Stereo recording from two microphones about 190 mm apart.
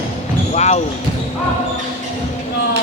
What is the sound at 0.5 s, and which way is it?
Basketball bounce, 35° left (ahead or behind).